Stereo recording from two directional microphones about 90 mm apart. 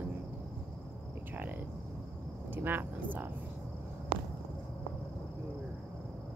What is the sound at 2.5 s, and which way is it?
Speech, 20° right (ahead or behind).